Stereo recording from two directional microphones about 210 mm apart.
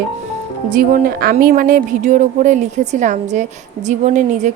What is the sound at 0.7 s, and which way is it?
Speech, 40° right (ahead or behind).